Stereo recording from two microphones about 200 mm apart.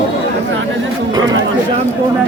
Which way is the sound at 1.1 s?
20° right (ahead or behind).